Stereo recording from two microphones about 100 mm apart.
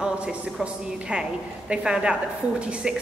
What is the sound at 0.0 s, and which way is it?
A woman's voice, 10° right (ahead or behind).